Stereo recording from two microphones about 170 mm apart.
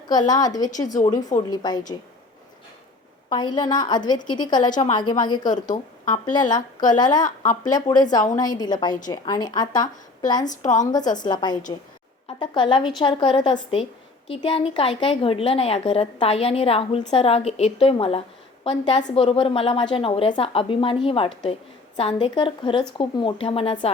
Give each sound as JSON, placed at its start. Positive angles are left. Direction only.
{"t": 0.1, "sound": "a woman's voice", "side_deg": 25}
{"t": 3.2, "sound": "a woman's voice", "side_deg": 25}
{"t": 5.5, "sound": "speech", "side_deg": 50}
{"t": 6.5, "sound": "a woman's voice", "side_deg": 25}
{"t": 7.3, "sound": "speech", "side_deg": 50}
{"t": 7.7, "sound": "a woman's voice", "side_deg": 20}
{"t": 10.6, "sound": "speech", "side_deg": 45}
{"t": 10.9, "sound": "a woman's voice", "side_deg": 25}